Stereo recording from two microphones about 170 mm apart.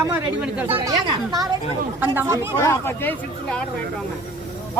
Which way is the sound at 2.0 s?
15° right (ahead or behind).